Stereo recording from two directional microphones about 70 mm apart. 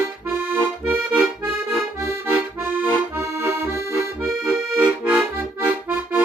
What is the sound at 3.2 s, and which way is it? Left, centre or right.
Accordion, right.